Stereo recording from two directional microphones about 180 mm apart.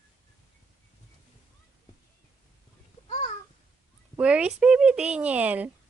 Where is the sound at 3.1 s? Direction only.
45° left (ahead or behind).